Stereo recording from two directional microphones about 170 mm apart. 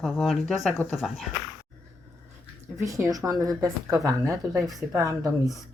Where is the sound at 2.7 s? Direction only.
20° right (ahead or behind).